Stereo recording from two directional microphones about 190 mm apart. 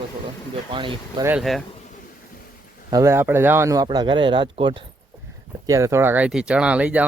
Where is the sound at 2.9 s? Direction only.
15° right (ahead or behind).